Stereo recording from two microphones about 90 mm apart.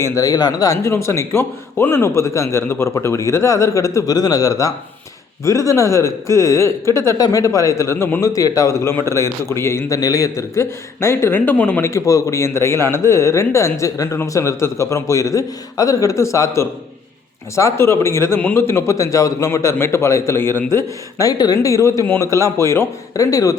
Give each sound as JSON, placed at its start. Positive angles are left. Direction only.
{"t": 0.0, "sound": "a man's voice", "side_deg": 40}
{"t": 8.3, "sound": "a man's voice", "side_deg": 40}
{"t": 10.0, "sound": "a man's voice", "side_deg": 40}
{"t": 11.8, "sound": "a man's voice", "side_deg": 35}
{"t": 18.3, "sound": "a man's voice", "side_deg": 20}
{"t": 20.7, "sound": "a man's voice", "side_deg": 40}
{"t": 22.0, "sound": "a man's voice", "side_deg": 20}